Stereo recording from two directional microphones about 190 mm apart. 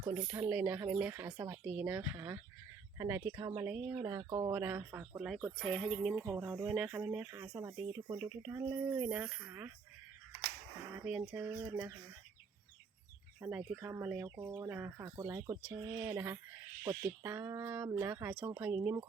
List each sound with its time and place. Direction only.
0.1 s speech: 10° right (ahead or behind)
4.0 s speech: 20° right (ahead or behind)
4.5 s speech: 10° right (ahead or behind)
6.2 s speech: 15° right (ahead or behind)
8.2 s speech: 5° right (ahead or behind)
11.3 s speech: 10° right (ahead or behind)
13.4 s speech: 5° right (ahead or behind)